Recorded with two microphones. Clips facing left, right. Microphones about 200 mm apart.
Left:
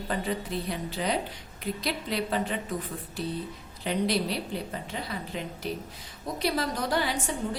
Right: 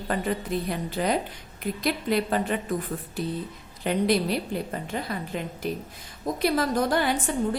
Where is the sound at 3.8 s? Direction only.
50° right (ahead or behind).